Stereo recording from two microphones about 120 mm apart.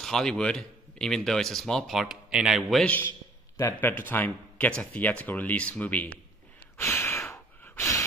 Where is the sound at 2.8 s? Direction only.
15° left (ahead or behind).